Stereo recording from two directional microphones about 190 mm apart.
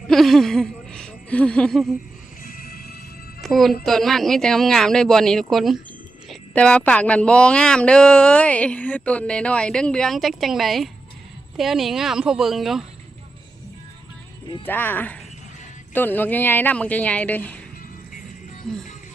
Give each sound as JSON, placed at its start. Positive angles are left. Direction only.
{"t": 0.1, "sound": "speech", "side_deg": 0}
{"t": 2.4, "sound": "music", "side_deg": 50}
{"t": 3.4, "sound": "a woman's voice", "side_deg": 0}
{"t": 14.6, "sound": "speech", "side_deg": 10}